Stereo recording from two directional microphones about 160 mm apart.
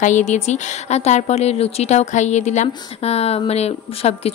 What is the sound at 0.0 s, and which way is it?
A woman's voice, 50° left (ahead or behind).